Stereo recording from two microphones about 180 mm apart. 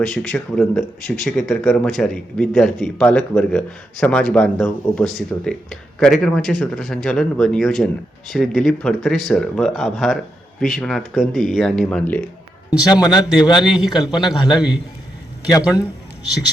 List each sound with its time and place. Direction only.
0.0 s a man's voice: centre (ahead or behind)
12.9 s a man's voice: 25° left (ahead or behind)
13.7 s a man's voice: 5° right (ahead or behind)
15.4 s a man's voice: 20° left (ahead or behind)